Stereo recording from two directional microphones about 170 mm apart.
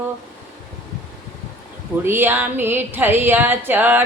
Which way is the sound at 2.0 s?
15° right (ahead or behind).